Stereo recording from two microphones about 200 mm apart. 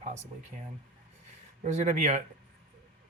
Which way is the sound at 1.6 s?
35° right (ahead or behind).